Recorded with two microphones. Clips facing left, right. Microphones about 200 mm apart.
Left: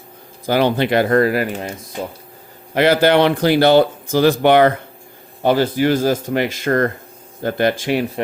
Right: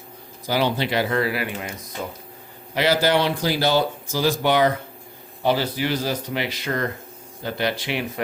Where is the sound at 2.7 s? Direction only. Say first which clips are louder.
Left 6 dB; 55° left (ahead or behind).